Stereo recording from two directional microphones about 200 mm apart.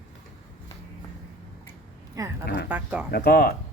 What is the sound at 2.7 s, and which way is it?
Speech, 5° right (ahead or behind).